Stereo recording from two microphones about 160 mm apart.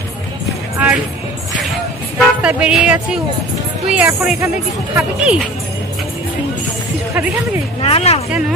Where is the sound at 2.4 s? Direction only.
5° right (ahead or behind).